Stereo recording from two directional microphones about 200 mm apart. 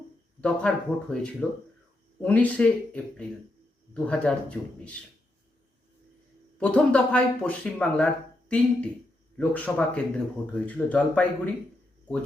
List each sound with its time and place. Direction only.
0.4 s speech: 5° left (ahead or behind)
6.6 s speech: 5° left (ahead or behind)